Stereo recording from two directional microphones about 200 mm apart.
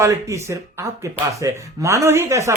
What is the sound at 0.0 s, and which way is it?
Speech, 15° right (ahead or behind).